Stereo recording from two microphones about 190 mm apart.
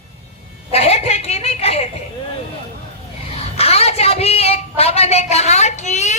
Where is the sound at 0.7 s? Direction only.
35° left (ahead or behind).